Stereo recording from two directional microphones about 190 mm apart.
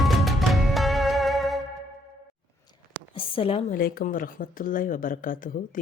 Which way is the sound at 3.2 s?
30° left (ahead or behind).